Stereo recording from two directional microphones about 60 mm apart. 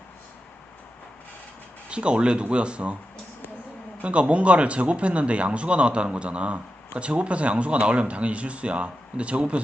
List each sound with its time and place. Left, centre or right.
1.9 s speech: centre
4.0 s speech: right